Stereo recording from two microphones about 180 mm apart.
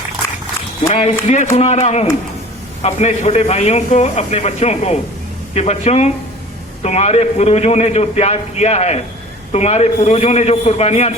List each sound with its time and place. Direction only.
0.9 s a man's voice: 35° left (ahead or behind)